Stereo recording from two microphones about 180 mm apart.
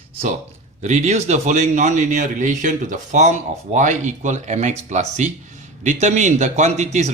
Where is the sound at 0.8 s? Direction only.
40° right (ahead or behind).